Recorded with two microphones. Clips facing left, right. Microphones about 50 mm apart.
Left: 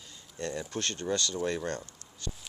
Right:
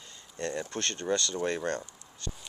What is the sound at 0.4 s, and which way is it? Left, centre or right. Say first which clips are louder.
Speech: right 1 dB; right.